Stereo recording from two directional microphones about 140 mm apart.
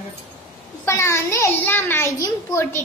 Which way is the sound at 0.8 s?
20° left (ahead or behind).